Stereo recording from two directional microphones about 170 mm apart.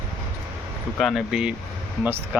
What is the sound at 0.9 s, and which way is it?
Speech, centre (ahead or behind).